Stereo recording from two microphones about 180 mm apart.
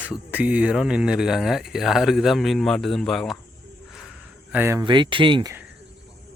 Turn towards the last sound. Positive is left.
turn(degrees=-25)  # may be behind; listen again after turning